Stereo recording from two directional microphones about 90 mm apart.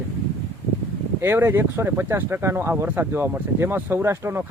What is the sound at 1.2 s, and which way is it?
Speech, 25° right (ahead or behind).